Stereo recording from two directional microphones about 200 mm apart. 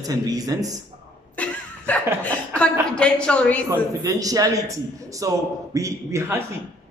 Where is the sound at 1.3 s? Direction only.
5° left (ahead or behind).